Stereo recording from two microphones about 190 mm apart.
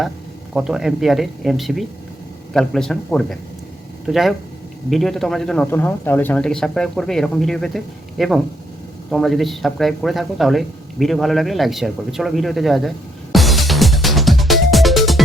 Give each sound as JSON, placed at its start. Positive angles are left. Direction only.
{"t": 0.5, "sound": "speech", "side_deg": 0}
{"t": 13.3, "sound": "music", "side_deg": 0}